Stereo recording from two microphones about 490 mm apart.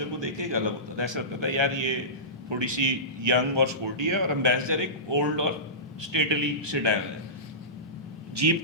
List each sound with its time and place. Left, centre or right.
0.0 s a man's voice: right
8.4 s speech: right